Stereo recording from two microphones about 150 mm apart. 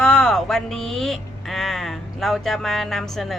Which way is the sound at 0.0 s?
5° left (ahead or behind).